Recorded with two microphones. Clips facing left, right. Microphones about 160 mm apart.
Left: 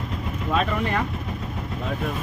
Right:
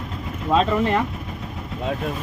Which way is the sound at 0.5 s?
25° right (ahead or behind).